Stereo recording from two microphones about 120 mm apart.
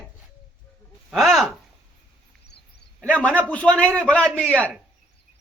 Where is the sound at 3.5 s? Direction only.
10° left (ahead or behind).